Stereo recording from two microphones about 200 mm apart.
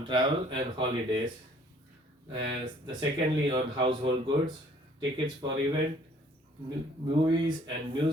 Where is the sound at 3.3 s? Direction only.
25° right (ahead or behind).